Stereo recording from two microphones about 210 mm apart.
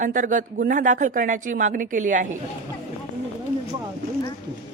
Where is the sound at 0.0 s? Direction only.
40° right (ahead or behind).